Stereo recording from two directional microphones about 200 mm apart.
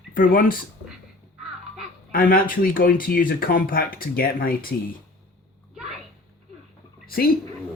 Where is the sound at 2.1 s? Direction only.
45° left (ahead or behind).